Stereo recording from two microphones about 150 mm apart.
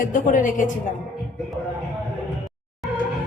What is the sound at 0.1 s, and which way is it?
Speech, 60° left (ahead or behind).